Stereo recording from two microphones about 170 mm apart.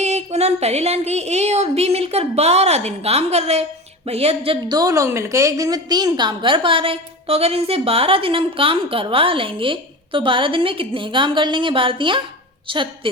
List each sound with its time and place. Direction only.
0.0 s a woman's voice: 40° right (ahead or behind)
4.7 s a woman's voice: 20° right (ahead or behind)